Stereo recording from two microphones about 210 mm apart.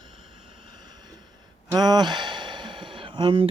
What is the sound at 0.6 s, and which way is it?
Vehicle, 20° right (ahead or behind).